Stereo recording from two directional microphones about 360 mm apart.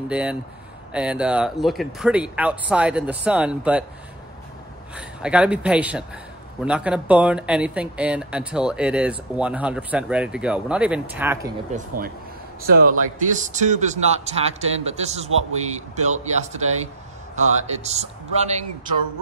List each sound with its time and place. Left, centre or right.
0.1 s speech: centre
4.9 s speech: centre
11.7 s a man's voice: right